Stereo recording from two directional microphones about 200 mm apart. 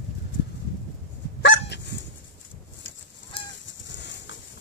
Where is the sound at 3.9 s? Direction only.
60° left (ahead or behind).